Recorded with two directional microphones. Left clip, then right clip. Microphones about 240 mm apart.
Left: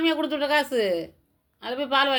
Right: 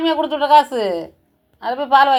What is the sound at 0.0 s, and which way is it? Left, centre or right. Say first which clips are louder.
A woman's voice: right 6 dB; left.